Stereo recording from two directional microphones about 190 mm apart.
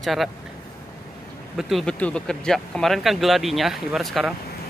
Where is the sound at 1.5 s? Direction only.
Centre (ahead or behind).